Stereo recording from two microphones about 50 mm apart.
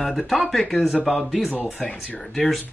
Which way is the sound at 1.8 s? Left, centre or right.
Left.